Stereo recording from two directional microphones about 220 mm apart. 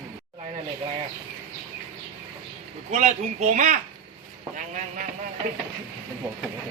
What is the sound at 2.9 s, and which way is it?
A man's voice, 30° right (ahead or behind).